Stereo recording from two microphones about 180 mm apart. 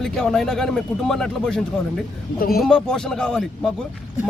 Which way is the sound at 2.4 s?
55° left (ahead or behind).